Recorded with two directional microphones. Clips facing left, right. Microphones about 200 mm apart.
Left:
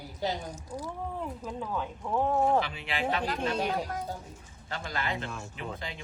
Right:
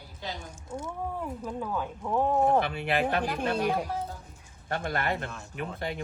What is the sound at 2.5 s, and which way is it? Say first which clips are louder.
Speech: right 4 dB; 55° right (ahead or behind).